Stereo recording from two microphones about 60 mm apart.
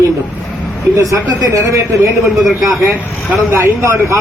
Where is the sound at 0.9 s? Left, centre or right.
Right.